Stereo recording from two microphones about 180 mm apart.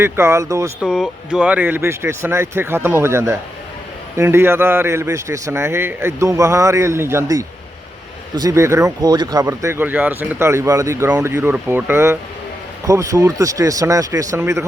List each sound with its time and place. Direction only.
0.0 s speech: 15° right (ahead or behind)
0.8 s speech: centre (ahead or behind); by 14.6 s 15° right (ahead or behind)